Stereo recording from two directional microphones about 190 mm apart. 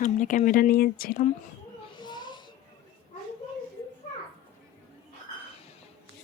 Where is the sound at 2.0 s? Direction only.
25° left (ahead or behind).